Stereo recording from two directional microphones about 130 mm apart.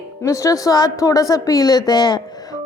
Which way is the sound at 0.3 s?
25° left (ahead or behind).